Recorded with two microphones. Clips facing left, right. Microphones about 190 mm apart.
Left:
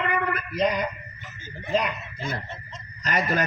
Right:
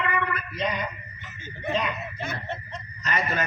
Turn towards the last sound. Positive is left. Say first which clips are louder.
# left 3 dB
turn(degrees=35)  # may be behind; listen again after turning